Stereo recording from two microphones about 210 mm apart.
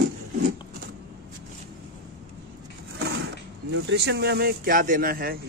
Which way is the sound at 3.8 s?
55° right (ahead or behind).